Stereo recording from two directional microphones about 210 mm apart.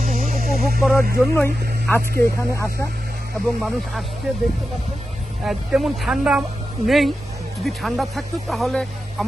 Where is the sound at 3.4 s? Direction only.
Centre (ahead or behind).